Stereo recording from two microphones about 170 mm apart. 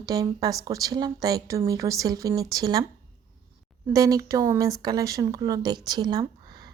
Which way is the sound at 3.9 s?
20° right (ahead or behind).